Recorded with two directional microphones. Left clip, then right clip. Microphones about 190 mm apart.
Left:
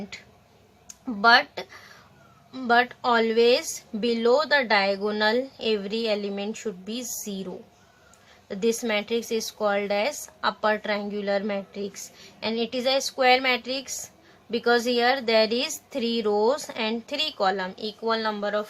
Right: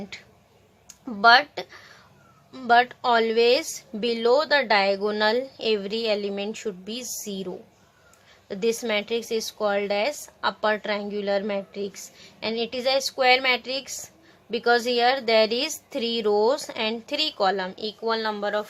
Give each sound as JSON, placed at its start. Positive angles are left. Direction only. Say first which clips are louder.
{"t": 0.1, "sound": "speech", "louder": "right 1 dB", "side_deg": -25}